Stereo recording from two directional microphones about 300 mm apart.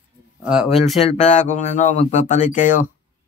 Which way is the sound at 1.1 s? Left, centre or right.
Left.